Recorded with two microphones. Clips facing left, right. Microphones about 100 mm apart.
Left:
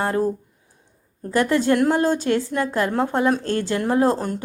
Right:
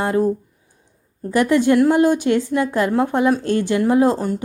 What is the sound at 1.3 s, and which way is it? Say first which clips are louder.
Speech: right 3 dB; 15° right (ahead or behind).